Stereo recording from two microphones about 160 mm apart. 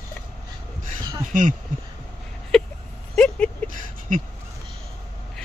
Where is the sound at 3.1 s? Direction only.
5° left (ahead or behind).